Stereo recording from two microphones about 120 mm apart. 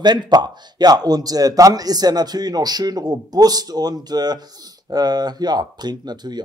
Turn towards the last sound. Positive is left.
turn(degrees=-35)  # may be behind; listen again after turning